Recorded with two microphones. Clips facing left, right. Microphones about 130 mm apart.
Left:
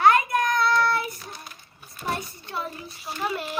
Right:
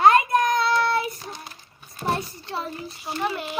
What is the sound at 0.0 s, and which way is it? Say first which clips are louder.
Child singing: right 3 dB; 25° right (ahead or behind).